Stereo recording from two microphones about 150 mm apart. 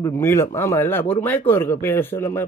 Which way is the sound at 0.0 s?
20° left (ahead or behind).